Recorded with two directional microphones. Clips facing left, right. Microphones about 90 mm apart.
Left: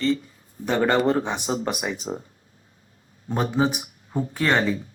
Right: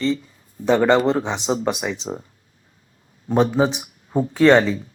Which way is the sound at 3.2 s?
25° right (ahead or behind).